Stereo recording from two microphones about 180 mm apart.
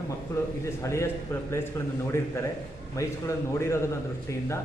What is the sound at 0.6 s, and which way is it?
Speech, 15° left (ahead or behind).